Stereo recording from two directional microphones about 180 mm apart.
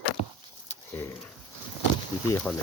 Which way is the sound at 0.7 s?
15° left (ahead or behind).